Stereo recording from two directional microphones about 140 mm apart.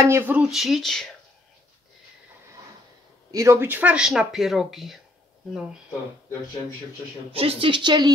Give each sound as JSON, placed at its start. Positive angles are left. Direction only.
{"t": 0.0, "sound": "speech", "side_deg": -15}
{"t": 0.5, "sound": "speech", "side_deg": 0}
{"t": 3.3, "sound": "speech", "side_deg": -20}
{"t": 7.3, "sound": "a woman's voice", "side_deg": -45}